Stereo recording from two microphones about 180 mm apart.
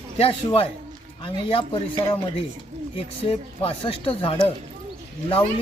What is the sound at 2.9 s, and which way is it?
Speech, 30° left (ahead or behind).